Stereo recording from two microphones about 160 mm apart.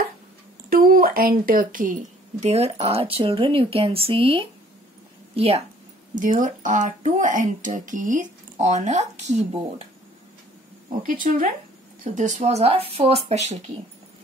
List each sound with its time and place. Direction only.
0.7 s a woman's voice: 65° right (ahead or behind)
2.4 s speech: 40° right (ahead or behind)
6.1 s speech: 55° right (ahead or behind)
11.0 s speech: 55° right (ahead or behind)